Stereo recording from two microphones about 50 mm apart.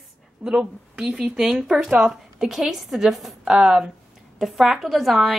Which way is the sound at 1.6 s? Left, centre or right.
Centre.